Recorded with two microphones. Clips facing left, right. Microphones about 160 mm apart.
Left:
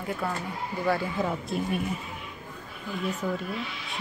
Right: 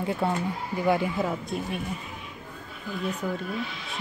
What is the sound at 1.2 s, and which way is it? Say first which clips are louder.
Speech: even; centre (ahead or behind).